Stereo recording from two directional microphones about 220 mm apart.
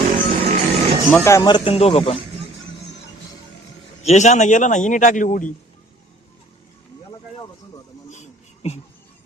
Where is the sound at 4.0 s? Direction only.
30° left (ahead or behind).